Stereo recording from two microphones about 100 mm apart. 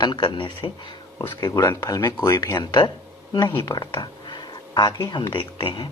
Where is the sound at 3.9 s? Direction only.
50° left (ahead or behind).